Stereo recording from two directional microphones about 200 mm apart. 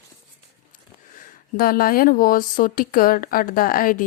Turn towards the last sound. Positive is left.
turn(degrees=45)  # may be behind; listen again after turning